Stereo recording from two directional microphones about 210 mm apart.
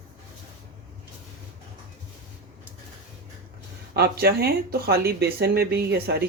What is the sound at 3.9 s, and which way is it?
Speech, 50° right (ahead or behind).